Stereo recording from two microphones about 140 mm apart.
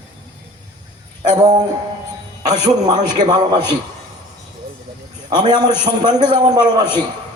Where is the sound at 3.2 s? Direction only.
30° right (ahead or behind).